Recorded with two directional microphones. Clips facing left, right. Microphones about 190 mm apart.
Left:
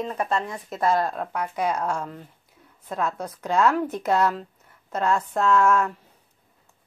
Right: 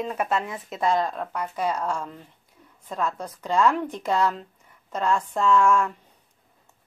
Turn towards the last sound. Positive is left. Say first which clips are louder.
# even
turn(degrees=5)  # may be behind; listen again after turning